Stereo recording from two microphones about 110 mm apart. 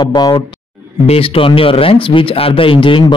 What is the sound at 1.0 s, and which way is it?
Speech, 60° left (ahead or behind).